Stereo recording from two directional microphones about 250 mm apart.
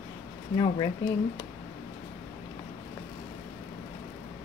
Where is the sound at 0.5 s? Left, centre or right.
Centre.